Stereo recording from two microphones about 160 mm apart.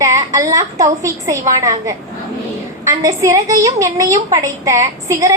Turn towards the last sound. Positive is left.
turn(degrees=-20)  # may be behind; listen again after turning